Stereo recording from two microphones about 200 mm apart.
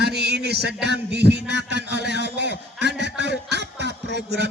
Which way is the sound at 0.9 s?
55° right (ahead or behind).